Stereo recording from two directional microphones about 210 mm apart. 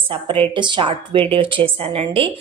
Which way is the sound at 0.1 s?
25° right (ahead or behind).